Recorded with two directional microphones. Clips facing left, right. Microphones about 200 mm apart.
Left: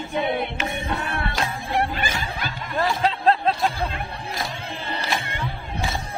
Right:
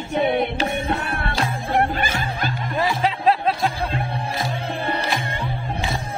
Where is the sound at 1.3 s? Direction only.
50° right (ahead or behind).